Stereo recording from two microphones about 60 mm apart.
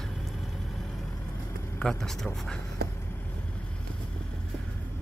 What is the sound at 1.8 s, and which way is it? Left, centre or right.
Speech, centre.